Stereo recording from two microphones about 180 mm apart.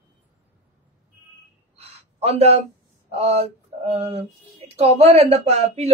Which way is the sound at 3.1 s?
35° right (ahead or behind).